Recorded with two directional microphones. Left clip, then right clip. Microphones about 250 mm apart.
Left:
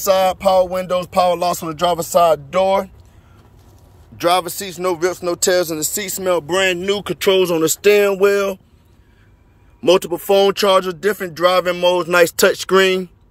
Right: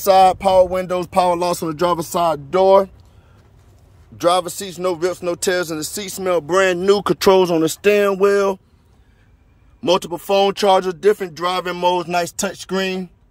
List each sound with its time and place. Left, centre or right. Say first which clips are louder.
0.0 s speech: right 2 dB; right
4.2 s speech: even; centre
9.8 s speech: left 3 dB; centre
12.1 s speech: left 8 dB; centre